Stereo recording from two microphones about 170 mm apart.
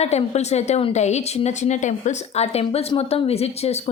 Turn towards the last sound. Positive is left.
turn(degrees=40)  # may be behind; listen again after turning